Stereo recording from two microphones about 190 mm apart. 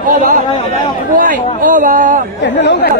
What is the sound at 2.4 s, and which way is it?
Speech, 65° left (ahead or behind).